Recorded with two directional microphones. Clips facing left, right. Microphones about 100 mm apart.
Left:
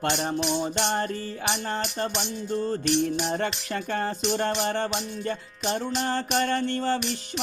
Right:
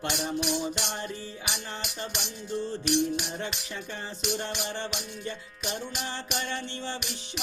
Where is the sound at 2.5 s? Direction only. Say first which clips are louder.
Left 3 dB; 55° left (ahead or behind).